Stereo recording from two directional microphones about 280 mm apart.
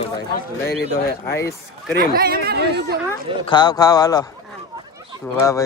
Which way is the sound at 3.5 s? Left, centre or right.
Centre.